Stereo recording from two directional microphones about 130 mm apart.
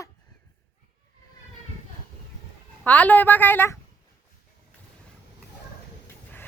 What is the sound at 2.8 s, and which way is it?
Speech, 10° left (ahead or behind).